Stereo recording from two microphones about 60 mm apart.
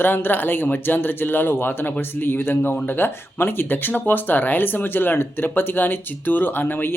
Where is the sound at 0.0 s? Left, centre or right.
Left.